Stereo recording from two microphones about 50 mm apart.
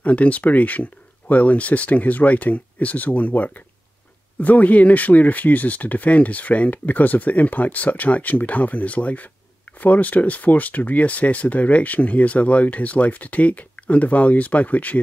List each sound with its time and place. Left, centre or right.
0.0 s speech: left